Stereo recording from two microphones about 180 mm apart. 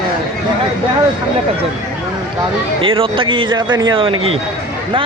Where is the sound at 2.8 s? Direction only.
30° right (ahead or behind).